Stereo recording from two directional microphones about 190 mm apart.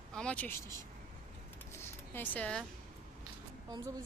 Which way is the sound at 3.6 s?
20° right (ahead or behind).